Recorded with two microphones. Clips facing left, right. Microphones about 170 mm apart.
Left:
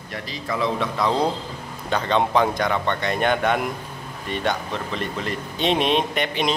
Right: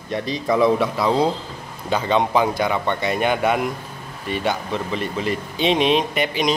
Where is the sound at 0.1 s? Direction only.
20° right (ahead or behind).